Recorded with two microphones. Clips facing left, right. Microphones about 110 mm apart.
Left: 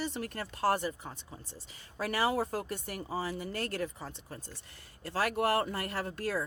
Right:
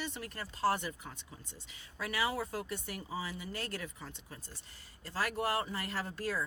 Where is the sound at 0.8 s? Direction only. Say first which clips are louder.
Left 6 dB; 35° left (ahead or behind).